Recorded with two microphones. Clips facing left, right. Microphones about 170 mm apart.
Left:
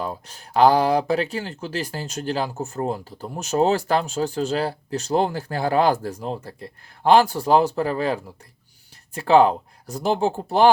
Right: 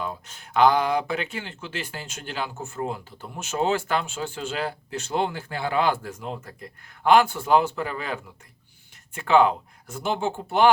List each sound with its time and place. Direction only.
0.0 s speech: 35° left (ahead or behind)